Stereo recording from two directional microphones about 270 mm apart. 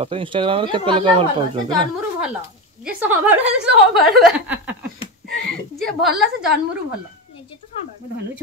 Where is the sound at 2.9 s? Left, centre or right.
Centre.